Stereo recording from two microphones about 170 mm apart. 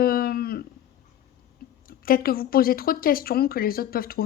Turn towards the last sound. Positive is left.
turn(degrees=60)  # may be behind; listen again after turning